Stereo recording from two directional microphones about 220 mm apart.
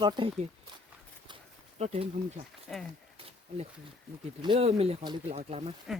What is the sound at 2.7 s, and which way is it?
Speech, centre (ahead or behind).